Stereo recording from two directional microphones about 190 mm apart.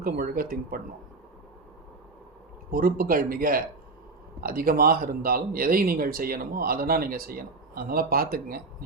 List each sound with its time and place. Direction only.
0.0 s speech: 50° right (ahead or behind)
2.6 s speech: 50° right (ahead or behind)